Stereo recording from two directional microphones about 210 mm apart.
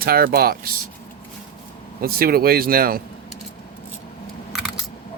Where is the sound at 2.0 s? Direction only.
45° right (ahead or behind).